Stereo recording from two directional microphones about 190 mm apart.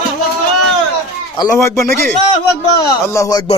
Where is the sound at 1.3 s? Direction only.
15° left (ahead or behind).